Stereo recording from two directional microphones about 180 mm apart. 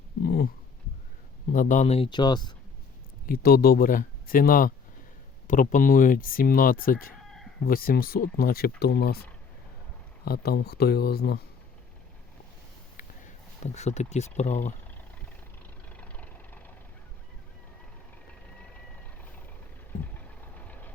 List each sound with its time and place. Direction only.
0.3 s speech: 55° left (ahead or behind)
1.5 s speech: 45° left (ahead or behind); by 2.5 s 25° left (ahead or behind)
3.2 s speech: 55° left (ahead or behind)
7.3 s chicken: centre (ahead or behind)
7.6 s speech: 55° left (ahead or behind)
10.2 s speech: 60° left (ahead or behind)
13.7 s speech: 40° left (ahead or behind)
15.9 s vehicle: 5° left (ahead or behind)
20.1 s vehicle: 10° left (ahead or behind)